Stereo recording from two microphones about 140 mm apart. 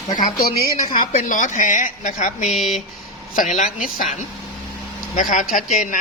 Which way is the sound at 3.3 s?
65° left (ahead or behind).